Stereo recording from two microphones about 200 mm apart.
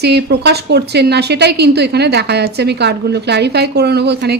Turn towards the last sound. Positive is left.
turn(degrees=-55)  # may be behind; listen again after turning